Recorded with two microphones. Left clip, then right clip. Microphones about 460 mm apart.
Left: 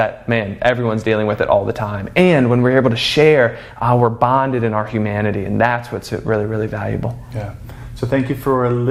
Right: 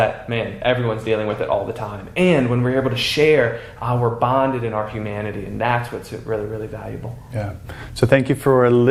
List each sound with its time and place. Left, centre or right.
0.0 s speech: left
8.1 s speech: right